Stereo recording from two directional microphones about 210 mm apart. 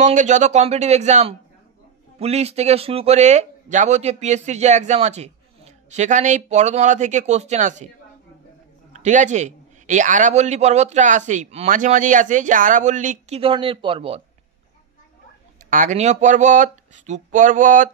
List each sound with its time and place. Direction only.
0.0 s speech: 35° right (ahead or behind)
8.9 s speech: 35° right (ahead or behind)
15.7 s speech: 35° right (ahead or behind)